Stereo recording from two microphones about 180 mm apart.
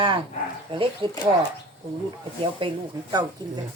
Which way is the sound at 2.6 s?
30° right (ahead or behind).